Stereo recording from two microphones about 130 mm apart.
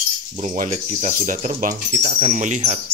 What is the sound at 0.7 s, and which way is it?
Speech, 75° right (ahead or behind).